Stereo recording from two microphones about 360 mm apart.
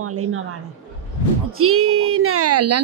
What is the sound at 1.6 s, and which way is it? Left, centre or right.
Speech, right.